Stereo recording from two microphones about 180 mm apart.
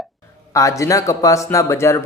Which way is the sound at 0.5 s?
15° left (ahead or behind).